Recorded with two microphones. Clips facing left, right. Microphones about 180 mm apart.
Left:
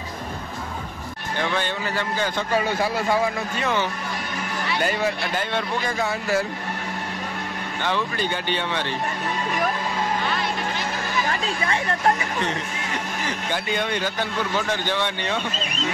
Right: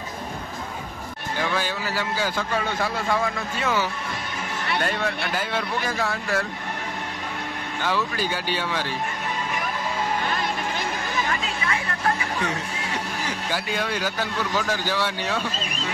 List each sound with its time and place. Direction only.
1.4 s a man's voice: 5° right (ahead or behind)
4.8 s a man's voice: 5° left (ahead or behind)
7.8 s a man's voice: 5° right (ahead or behind)
11.2 s chatter: 30° left (ahead or behind)
13.5 s a man's voice: 5° right (ahead or behind)